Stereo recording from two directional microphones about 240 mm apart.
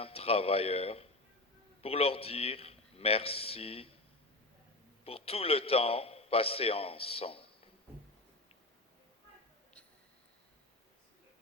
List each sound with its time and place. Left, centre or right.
0.0 s a man's voice: left
5.0 s a man's voice: left